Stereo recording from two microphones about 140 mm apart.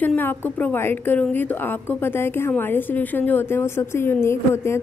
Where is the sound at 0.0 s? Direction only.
15° left (ahead or behind).